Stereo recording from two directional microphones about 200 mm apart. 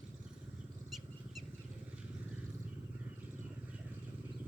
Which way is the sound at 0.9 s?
Centre (ahead or behind).